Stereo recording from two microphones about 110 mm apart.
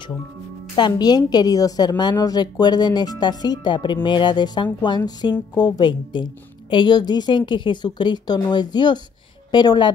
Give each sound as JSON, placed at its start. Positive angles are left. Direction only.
{"t": 0.7, "sound": "a woman's voice", "side_deg": 40}